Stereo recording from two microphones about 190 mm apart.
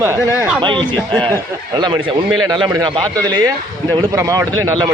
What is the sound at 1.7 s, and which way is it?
A man's voice, 25° right (ahead or behind).